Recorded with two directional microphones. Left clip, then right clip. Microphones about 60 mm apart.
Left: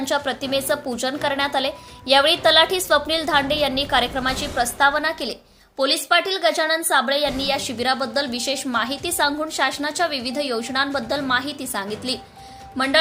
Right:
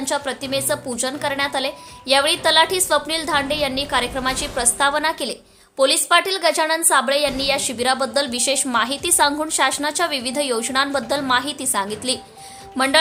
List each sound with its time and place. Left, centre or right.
0.0 s a woman's voice: centre
4.4 s a woman's voice: right